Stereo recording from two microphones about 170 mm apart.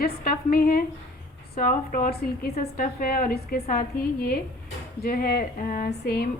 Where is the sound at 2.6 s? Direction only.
55° left (ahead or behind).